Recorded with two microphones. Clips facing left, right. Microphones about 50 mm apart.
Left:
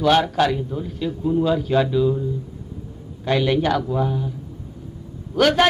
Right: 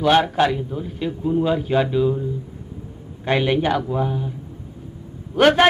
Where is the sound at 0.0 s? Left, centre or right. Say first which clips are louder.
Right 1 dB; centre.